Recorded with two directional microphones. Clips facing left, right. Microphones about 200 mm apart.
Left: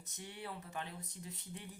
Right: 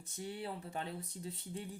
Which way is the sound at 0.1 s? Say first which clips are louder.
Right 5 dB; 30° right (ahead or behind).